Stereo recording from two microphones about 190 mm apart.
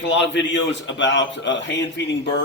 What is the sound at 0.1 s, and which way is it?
A man's voice, 70° left (ahead or behind).